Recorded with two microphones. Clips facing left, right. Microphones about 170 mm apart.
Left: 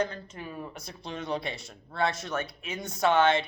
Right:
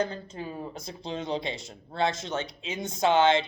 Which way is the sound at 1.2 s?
90° right.